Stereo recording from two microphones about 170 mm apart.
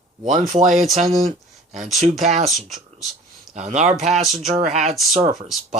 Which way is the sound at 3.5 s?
45° right (ahead or behind).